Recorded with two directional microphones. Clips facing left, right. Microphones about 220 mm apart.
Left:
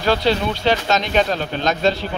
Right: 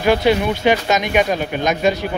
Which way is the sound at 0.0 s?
15° right (ahead or behind).